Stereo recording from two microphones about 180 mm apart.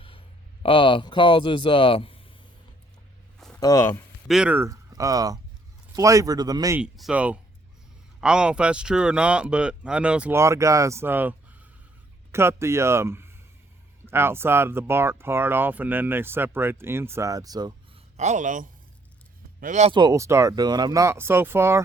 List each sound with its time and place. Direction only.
0.0 s speech: 30° left (ahead or behind)
3.6 s speech: 15° left (ahead or behind)
4.3 s speech: 5° right (ahead or behind); by 6.7 s 20° right (ahead or behind)
6.7 s speech: 5° right (ahead or behind); by 18.0 s 25° right (ahead or behind)
18.2 s speech: 40° right (ahead or behind)
19.9 s speech: 25° right (ahead or behind)